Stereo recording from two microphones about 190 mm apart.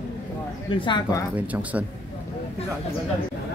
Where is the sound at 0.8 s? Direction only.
25° left (ahead or behind).